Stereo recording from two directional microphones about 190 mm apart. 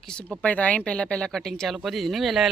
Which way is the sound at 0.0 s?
5° left (ahead or behind).